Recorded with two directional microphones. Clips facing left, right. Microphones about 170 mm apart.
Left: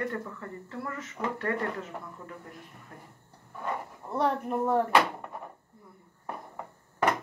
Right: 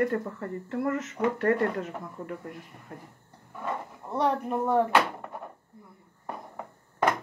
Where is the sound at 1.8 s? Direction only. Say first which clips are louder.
Right 5 dB; 65° right (ahead or behind).